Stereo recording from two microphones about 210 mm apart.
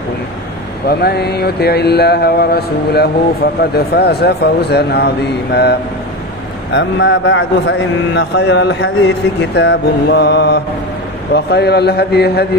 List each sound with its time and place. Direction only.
0.8 s mantra: 50° left (ahead or behind)
6.7 s a man's voice: 60° left (ahead or behind)
9.4 s mantra: 55° left (ahead or behind)